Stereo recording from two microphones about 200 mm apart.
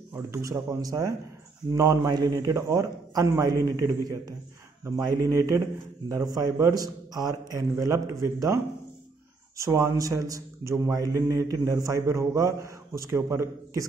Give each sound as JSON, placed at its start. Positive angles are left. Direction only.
{"t": 0.1, "sound": "a man's voice", "side_deg": -15}
{"t": 9.6, "sound": "a man's voice", "side_deg": -15}